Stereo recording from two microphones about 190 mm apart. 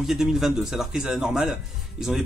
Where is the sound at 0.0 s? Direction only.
Centre (ahead or behind).